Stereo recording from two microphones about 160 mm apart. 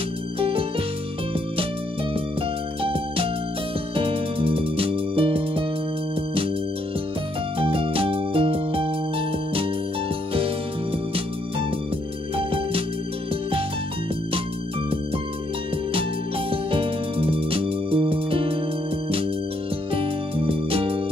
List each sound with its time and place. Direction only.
0.4 s music: 35° right (ahead or behind)
2.8 s music: 35° right (ahead or behind)
7.5 s music: 35° right (ahead or behind)
12.4 s music: 35° right (ahead or behind)
15.9 s music: 35° right (ahead or behind)
19.9 s music: 35° right (ahead or behind)